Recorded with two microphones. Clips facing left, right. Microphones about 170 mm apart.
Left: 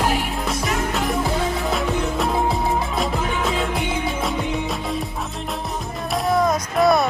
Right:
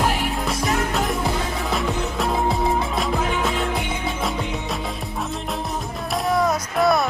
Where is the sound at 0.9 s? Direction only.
Centre (ahead or behind).